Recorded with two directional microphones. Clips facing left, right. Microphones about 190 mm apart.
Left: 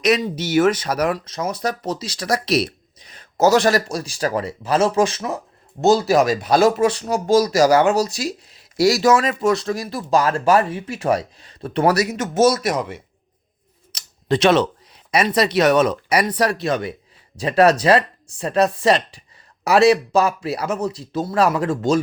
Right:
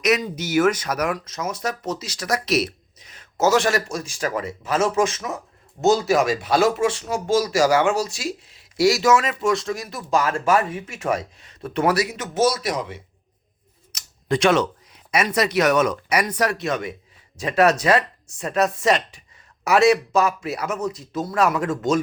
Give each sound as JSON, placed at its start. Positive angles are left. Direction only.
{"t": 0.0, "sound": "speech", "side_deg": 30}
{"t": 13.9, "sound": "a sound", "side_deg": 30}
{"t": 15.1, "sound": "speech", "side_deg": 30}